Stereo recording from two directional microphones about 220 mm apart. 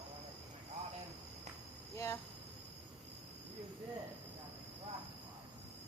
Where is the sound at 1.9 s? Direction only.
15° left (ahead or behind).